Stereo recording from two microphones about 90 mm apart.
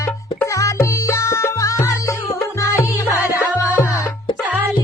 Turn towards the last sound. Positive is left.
turn(degrees=30)  # may be behind; listen again after turning